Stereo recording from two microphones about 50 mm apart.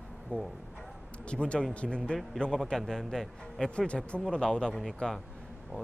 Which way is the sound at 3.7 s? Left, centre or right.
Left.